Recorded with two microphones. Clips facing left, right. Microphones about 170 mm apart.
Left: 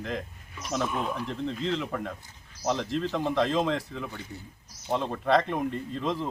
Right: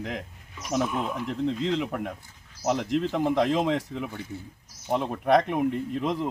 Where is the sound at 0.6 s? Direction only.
5° right (ahead or behind).